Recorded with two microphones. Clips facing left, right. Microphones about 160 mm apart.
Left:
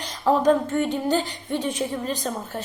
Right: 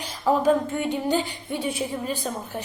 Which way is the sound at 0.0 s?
10° right (ahead or behind).